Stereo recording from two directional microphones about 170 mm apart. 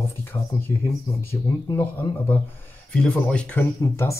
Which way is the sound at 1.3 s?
15° left (ahead or behind).